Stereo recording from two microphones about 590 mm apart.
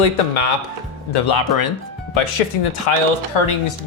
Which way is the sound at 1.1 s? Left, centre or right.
Left.